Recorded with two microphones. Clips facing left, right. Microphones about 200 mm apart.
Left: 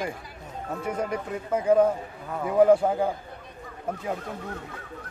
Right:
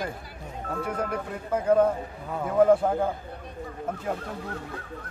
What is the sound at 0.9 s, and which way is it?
Speech, 10° left (ahead or behind).